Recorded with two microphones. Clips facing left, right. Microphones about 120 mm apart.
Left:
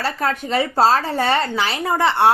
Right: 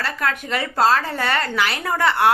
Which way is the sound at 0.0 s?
30° left (ahead or behind).